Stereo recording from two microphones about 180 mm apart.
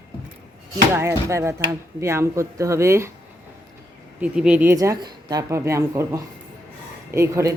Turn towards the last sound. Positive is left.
turn(degrees=-15)  # may be behind; listen again after turning